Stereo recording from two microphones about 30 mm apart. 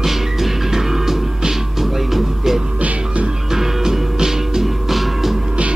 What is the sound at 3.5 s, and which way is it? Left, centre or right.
Music, centre.